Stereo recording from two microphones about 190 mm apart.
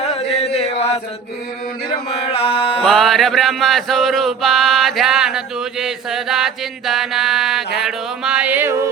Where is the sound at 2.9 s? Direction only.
Centre (ahead or behind).